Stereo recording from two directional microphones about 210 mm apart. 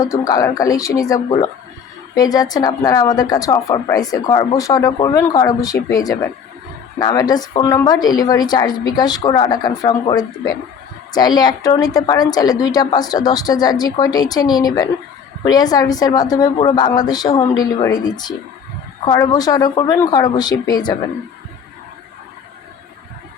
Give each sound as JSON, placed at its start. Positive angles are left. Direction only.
{"t": 0.0, "sound": "a woman's voice", "side_deg": 15}